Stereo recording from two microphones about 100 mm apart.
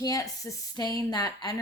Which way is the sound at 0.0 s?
35° left (ahead or behind).